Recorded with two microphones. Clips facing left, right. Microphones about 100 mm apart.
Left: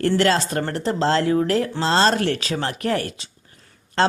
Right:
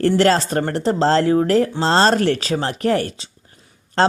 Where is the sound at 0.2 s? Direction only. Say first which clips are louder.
Right 4 dB; 35° right (ahead or behind).